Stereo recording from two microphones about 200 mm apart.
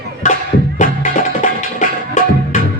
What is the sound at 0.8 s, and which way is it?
Music, 40° left (ahead or behind).